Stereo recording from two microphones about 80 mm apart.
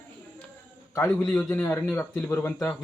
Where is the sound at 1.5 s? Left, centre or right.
Left.